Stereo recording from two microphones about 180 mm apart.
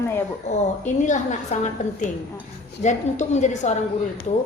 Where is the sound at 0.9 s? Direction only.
45° left (ahead or behind).